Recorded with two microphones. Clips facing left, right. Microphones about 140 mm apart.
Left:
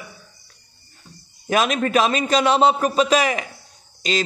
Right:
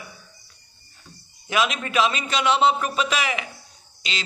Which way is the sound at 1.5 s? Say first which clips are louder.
Left 5 dB; 45° left (ahead or behind).